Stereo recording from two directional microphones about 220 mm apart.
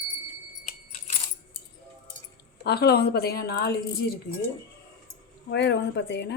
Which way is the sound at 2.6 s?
45° left (ahead or behind).